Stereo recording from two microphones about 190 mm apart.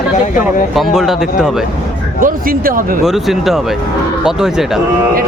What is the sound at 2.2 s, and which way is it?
Speech, 45° right (ahead or behind).